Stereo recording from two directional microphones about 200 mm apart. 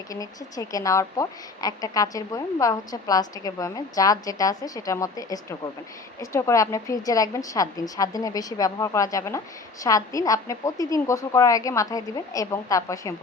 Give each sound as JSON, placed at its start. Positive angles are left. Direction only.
{"t": 0.1, "sound": "speech", "side_deg": 15}